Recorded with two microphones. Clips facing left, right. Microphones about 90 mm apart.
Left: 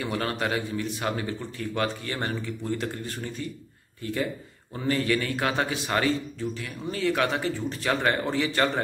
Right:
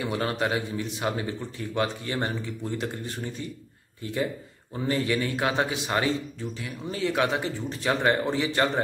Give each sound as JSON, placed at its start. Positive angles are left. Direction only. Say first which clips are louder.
{"t": 0.0, "sound": "speech", "louder": "right 1 dB", "side_deg": -20}
{"t": 4.0, "sound": "speech", "louder": "even", "side_deg": -20}